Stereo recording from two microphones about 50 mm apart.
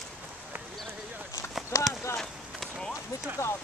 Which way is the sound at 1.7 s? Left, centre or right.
Left.